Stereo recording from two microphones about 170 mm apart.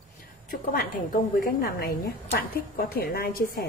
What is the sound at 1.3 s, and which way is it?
Speech, 60° left (ahead or behind).